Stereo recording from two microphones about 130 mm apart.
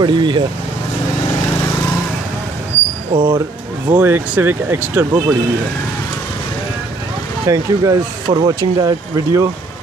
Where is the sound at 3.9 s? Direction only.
15° right (ahead or behind).